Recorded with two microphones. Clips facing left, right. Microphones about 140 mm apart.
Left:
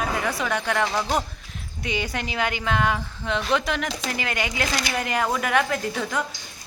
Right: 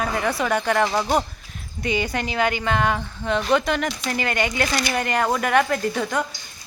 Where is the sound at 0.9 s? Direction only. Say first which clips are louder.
Right 3 dB; 15° right (ahead or behind).